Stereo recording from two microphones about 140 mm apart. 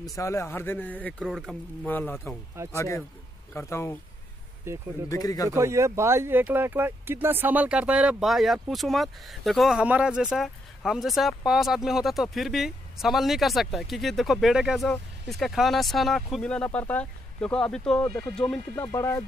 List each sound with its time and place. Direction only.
0.1 s speech: 20° left (ahead or behind)
4.7 s speech: 20° right (ahead or behind)
5.1 s speech: 25° left (ahead or behind)
5.5 s speech: 20° right (ahead or behind); by 18.6 s 5° left (ahead or behind)
18.9 s speech: 20° left (ahead or behind)